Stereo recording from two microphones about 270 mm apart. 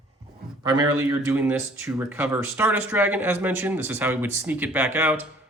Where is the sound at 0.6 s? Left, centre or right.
Centre.